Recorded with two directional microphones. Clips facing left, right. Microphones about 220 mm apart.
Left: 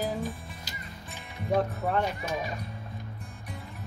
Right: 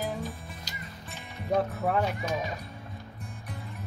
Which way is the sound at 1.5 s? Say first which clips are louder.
Even; 5° left (ahead or behind).